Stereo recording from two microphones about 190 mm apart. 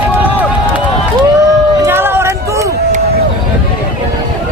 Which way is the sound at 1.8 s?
10° right (ahead or behind).